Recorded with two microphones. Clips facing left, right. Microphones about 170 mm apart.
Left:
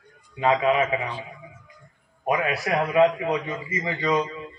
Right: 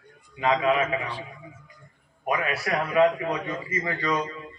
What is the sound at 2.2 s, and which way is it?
A man's voice, 20° left (ahead or behind).